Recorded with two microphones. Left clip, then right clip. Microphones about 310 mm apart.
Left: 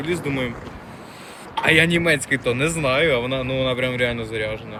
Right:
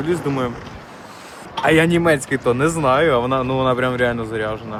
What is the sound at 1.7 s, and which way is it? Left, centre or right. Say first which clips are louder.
Speech: right 2 dB; centre.